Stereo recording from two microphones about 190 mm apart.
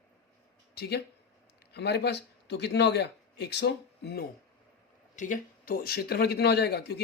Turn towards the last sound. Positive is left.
turn(degrees=60)  # may be behind; listen again after turning